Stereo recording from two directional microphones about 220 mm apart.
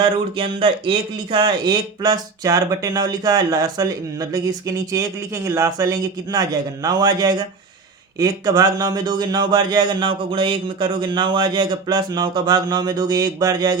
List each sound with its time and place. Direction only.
0.3 s a man's voice: 25° right (ahead or behind)